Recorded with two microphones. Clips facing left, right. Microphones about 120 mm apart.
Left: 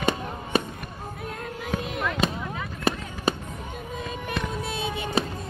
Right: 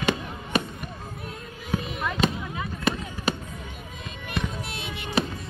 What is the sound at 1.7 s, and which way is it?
Fireworks, 90° left.